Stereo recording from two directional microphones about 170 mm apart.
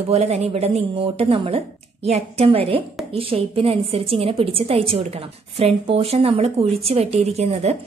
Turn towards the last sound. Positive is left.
turn(degrees=-40)  # may be behind; listen again after turning